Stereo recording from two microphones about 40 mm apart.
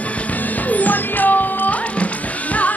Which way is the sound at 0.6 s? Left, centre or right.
Left.